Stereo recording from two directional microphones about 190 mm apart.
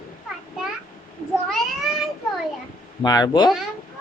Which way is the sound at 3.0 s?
20° left (ahead or behind).